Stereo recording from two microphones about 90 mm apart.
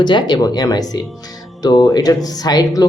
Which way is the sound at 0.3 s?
45° left (ahead or behind).